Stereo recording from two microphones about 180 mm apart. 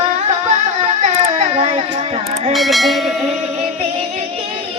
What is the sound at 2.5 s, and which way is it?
Speech, centre (ahead or behind).